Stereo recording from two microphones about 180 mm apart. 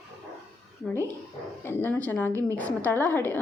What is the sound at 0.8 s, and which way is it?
A woman's voice, 5° left (ahead or behind).